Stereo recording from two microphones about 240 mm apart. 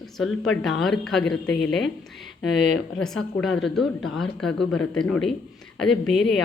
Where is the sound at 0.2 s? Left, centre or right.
Centre.